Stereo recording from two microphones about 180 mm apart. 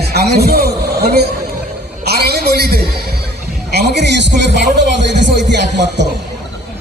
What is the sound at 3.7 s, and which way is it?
Music, 65° right (ahead or behind).